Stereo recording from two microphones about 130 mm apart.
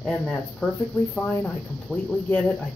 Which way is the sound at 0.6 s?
5° left (ahead or behind).